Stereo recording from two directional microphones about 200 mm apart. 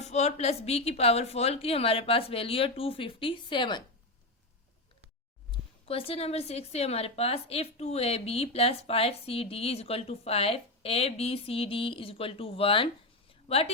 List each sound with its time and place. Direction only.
0.0 s a woman's voice: 35° left (ahead or behind)
5.5 s a woman's voice: 30° left (ahead or behind)